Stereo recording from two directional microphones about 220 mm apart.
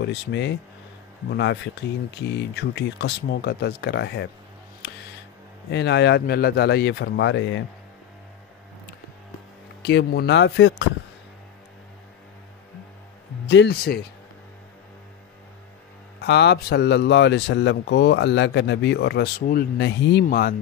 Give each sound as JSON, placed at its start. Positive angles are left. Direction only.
{"t": 0.0, "sound": "speech", "side_deg": 50}
{"t": 5.7, "sound": "speech", "side_deg": 50}
{"t": 9.8, "sound": "speech", "side_deg": 50}
{"t": 13.5, "sound": "speech", "side_deg": 50}
{"t": 16.2, "sound": "speech", "side_deg": 50}